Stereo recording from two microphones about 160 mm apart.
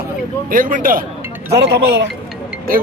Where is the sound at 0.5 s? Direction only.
60° right (ahead or behind).